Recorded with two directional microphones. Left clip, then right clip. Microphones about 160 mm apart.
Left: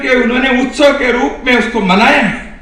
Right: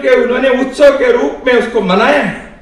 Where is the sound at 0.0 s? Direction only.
50° right (ahead or behind).